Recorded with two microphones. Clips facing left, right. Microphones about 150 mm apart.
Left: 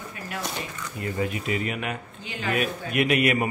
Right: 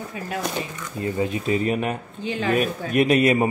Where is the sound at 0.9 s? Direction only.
25° right (ahead or behind).